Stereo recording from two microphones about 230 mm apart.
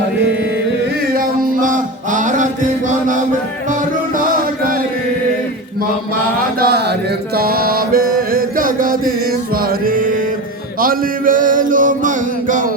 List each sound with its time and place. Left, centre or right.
1.1 s music: right
4.2 s music: right
6.6 s mantra: right
9.6 s music: right